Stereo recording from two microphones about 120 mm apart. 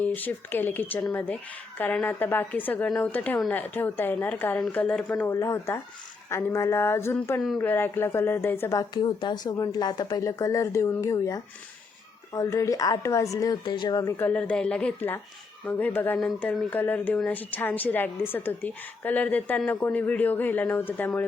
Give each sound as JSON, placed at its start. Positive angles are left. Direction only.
{"t": 0.0, "sound": "a woman's voice", "side_deg": 15}
{"t": 8.7, "sound": "a woman's voice", "side_deg": 35}
{"t": 14.2, "sound": "a woman's voice", "side_deg": 15}